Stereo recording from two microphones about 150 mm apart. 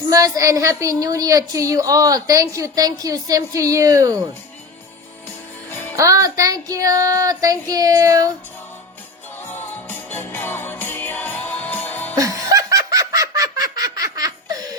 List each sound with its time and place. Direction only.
0.1 s a woman's voice: 20° right (ahead or behind)
6.0 s a woman's voice: 20° right (ahead or behind)
9.5 s music: 15° left (ahead or behind)
12.1 s snicker: 20° right (ahead or behind)